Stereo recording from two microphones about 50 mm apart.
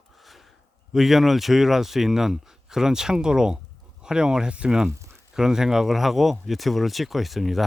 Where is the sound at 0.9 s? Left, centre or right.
Centre.